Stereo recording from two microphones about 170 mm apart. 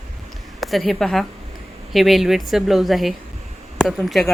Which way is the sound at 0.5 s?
Centre (ahead or behind).